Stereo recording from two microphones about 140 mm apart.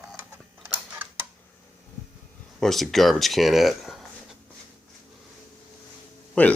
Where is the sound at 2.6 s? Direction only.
Centre (ahead or behind).